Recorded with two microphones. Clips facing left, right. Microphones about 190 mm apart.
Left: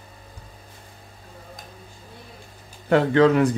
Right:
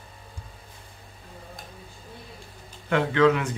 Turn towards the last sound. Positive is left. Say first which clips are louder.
# left 4 dB
turn(degrees=35)  # may be behind; listen again after turning